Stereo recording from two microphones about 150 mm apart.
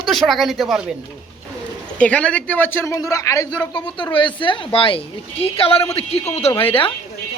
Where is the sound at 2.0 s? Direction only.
10° left (ahead or behind).